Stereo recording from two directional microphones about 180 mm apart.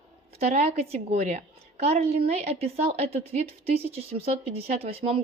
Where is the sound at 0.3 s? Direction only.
35° right (ahead or behind).